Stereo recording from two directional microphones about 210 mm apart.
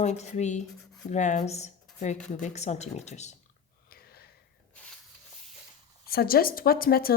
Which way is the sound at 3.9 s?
50° left (ahead or behind).